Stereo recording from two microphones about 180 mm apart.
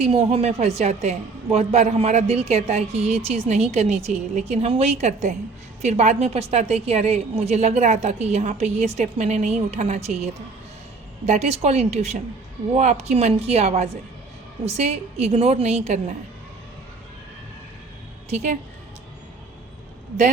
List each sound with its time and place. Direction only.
0.0 s a woman's voice: 35° right (ahead or behind)
11.3 s a woman's voice: 35° right (ahead or behind)
18.3 s a woman's voice: 40° right (ahead or behind)